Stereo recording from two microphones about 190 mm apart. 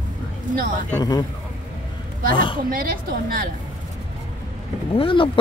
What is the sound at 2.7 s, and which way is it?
Speech, 50° right (ahead or behind).